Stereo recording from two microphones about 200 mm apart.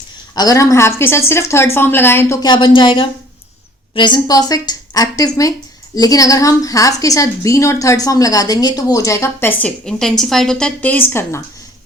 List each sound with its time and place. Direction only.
0.3 s a woman's voice: 15° left (ahead or behind)